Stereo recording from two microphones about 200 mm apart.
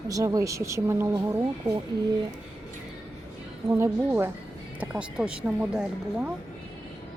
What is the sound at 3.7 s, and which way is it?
Speech, 15° right (ahead or behind).